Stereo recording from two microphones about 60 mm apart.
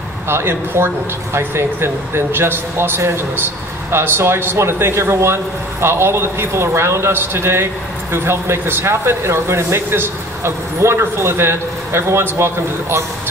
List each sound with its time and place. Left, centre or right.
0.3 s speech: right